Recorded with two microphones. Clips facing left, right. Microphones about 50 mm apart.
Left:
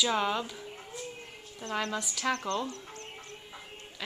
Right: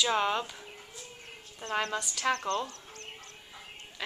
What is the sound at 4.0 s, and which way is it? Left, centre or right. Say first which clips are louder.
Speech: right 2 dB; centre.